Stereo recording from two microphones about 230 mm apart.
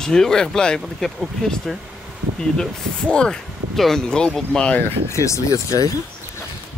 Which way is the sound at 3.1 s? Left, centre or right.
Centre.